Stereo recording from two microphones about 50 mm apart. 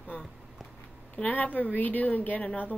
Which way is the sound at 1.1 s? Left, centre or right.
Left.